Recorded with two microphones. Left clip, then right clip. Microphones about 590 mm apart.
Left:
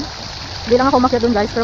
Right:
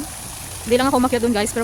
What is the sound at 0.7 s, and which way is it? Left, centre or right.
Speech, right.